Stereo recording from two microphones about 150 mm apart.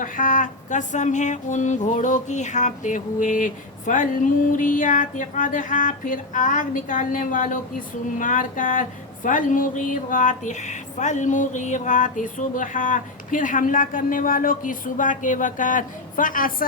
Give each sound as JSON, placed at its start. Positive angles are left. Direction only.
{"t": 0.0, "sound": "speech", "side_deg": 60}